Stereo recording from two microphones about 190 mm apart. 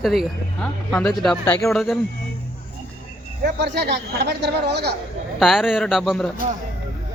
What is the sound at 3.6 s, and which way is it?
Speech, 60° right (ahead or behind).